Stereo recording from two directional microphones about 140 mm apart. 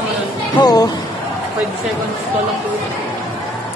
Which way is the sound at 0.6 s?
25° left (ahead or behind).